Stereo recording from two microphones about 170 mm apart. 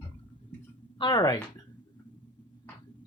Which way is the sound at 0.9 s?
25° left (ahead or behind).